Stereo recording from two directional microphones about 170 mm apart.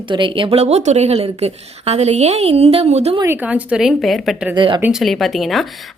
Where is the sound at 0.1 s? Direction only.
30° right (ahead or behind).